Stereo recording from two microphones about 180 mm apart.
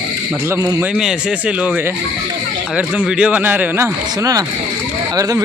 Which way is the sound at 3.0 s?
5° right (ahead or behind).